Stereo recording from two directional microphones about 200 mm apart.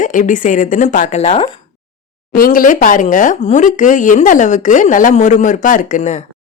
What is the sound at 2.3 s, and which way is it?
A woman's voice, 45° left (ahead or behind).